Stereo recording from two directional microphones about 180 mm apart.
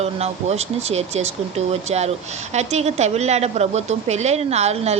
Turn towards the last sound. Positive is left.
turn(degrees=-35)  # may be behind; listen again after turning